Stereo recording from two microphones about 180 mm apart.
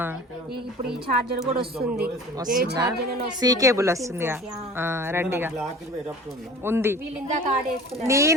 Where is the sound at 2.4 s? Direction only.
55° right (ahead or behind).